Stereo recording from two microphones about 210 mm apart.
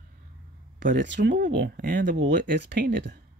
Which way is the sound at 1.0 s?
60° right (ahead or behind).